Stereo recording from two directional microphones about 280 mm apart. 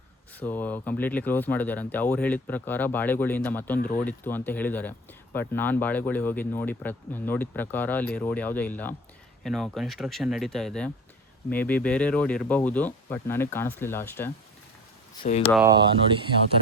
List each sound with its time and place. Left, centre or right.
0.3 s speech: centre
3.8 s speech: left
4.0 s speech: centre
15.2 s speech: left
15.5 s speech: centre